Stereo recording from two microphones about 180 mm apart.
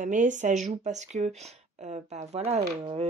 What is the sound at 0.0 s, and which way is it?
Speech, 45° right (ahead or behind).